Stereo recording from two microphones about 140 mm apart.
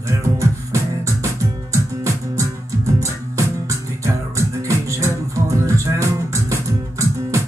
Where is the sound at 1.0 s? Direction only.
20° right (ahead or behind).